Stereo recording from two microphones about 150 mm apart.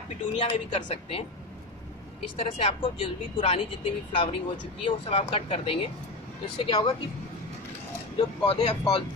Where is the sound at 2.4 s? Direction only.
40° left (ahead or behind).